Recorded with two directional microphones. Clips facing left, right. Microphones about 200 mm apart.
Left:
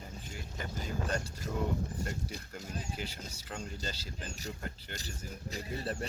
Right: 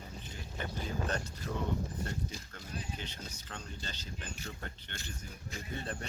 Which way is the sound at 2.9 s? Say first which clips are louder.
Left 2 dB; 10° left (ahead or behind).